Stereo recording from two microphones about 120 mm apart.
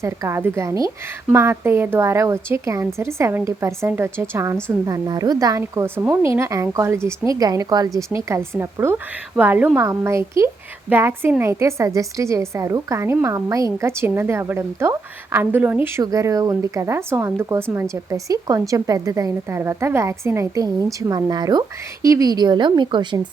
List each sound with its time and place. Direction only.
0.0 s a woman's voice: 25° right (ahead or behind)
4.9 s a woman's voice: 30° right (ahead or behind); by 9.8 s 15° right (ahead or behind)
9.8 s a woman's voice: 25° right (ahead or behind)
16.1 s a woman's voice: 30° right (ahead or behind)